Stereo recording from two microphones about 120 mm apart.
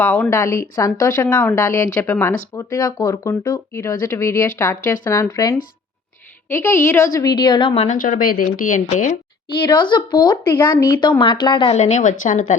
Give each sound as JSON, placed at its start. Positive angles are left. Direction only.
{"t": 0.3, "sound": "speech", "side_deg": 25}
{"t": 1.3, "sound": "speech", "side_deg": 15}
{"t": 7.7, "sound": "a woman's voice", "side_deg": 75}
{"t": 9.6, "sound": "speech", "side_deg": 40}
{"t": 11.7, "sound": "a woman's voice", "side_deg": 75}